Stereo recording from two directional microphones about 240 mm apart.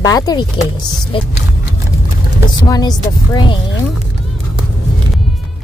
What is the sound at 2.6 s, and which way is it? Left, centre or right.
Speech, centre.